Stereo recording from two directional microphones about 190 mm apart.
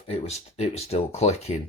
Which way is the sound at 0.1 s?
35° left (ahead or behind).